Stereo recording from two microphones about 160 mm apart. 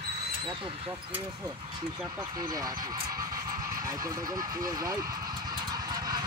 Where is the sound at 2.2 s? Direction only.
25° right (ahead or behind).